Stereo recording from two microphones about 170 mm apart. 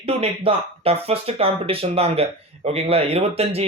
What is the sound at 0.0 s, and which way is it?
Speech, 35° right (ahead or behind).